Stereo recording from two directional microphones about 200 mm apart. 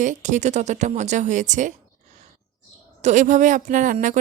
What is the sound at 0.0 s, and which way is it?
Speech, 40° right (ahead or behind).